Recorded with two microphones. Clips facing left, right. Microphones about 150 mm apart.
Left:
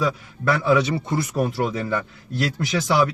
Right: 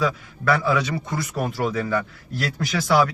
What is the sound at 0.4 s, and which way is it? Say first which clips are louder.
Speech: left 2 dB; 25° left (ahead or behind).